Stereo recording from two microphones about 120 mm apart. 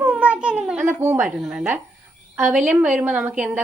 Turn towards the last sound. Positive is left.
turn(degrees=-15)  # may be behind; listen again after turning